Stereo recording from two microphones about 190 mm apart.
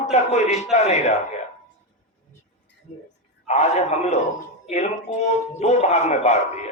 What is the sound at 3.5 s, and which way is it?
A man's voice, 35° left (ahead or behind).